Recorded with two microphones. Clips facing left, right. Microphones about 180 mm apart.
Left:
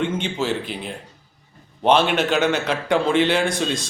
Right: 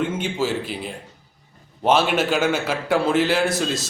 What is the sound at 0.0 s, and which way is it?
A man's voice, 5° right (ahead or behind).